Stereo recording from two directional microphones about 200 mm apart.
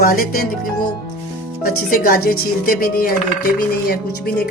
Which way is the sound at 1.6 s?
45° left (ahead or behind).